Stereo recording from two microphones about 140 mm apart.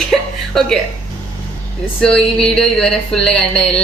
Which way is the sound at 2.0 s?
5° left (ahead or behind).